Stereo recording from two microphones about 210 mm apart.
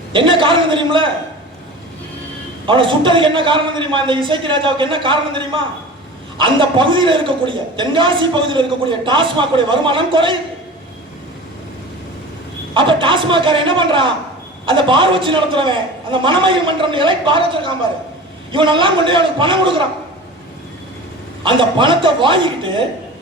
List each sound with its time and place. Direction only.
0.1 s a man's voice: 25° right (ahead or behind)
2.6 s a man's voice: 25° right (ahead or behind)
12.7 s a man's voice: 25° right (ahead or behind)
21.4 s a man's voice: 25° right (ahead or behind)